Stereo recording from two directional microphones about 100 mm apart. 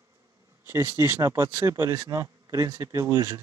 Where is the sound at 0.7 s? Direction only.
30° right (ahead or behind).